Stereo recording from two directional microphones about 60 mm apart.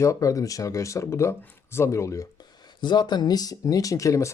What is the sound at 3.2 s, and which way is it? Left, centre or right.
Speech, left.